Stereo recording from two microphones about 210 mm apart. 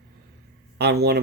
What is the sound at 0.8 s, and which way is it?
Speech, 50° right (ahead or behind).